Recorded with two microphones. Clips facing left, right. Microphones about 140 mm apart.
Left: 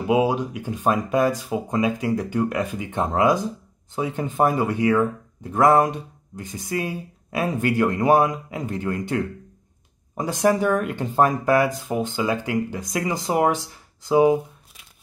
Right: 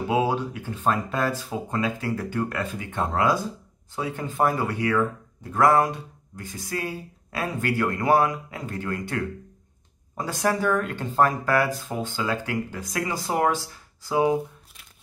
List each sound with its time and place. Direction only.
0.0 s speech: 15° left (ahead or behind)